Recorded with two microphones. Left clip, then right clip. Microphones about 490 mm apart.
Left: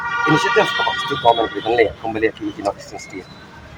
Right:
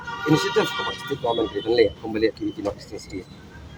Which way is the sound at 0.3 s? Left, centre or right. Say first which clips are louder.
Left 5 dB; right.